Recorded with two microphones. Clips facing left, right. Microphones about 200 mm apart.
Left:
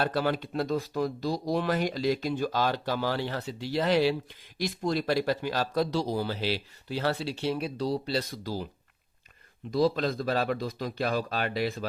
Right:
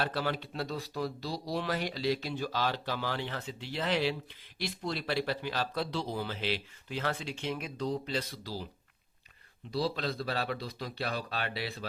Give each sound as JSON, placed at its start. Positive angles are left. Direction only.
{"t": 0.0, "sound": "speech", "side_deg": 45}
{"t": 9.7, "sound": "speech", "side_deg": 45}